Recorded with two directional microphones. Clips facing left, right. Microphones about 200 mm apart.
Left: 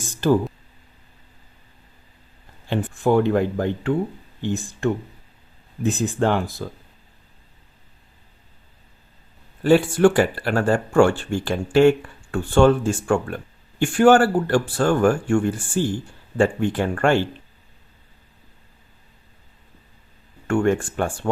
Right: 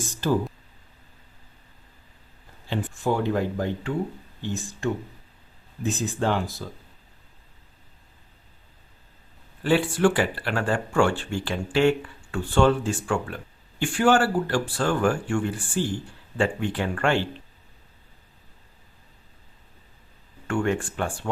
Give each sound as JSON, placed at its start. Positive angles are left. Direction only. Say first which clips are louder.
{"t": 2.6, "sound": "speech", "louder": "left 6 dB", "side_deg": 60}
{"t": 9.6, "sound": "speech", "louder": "left 6 dB", "side_deg": 45}
{"t": 20.5, "sound": "speech", "louder": "left 5 dB", "side_deg": 45}